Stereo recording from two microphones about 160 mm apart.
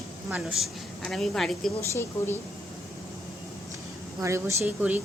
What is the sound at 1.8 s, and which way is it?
Speech, 15° left (ahead or behind).